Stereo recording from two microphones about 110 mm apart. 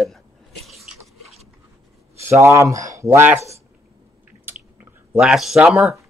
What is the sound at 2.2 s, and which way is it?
Speech, 25° right (ahead or behind).